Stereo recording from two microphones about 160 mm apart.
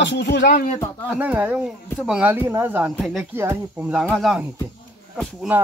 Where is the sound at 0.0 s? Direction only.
90° left; by 0.7 s 70° left (ahead or behind).